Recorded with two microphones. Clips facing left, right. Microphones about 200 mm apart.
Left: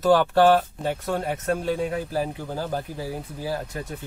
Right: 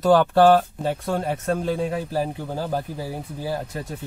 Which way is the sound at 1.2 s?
35° right (ahead or behind).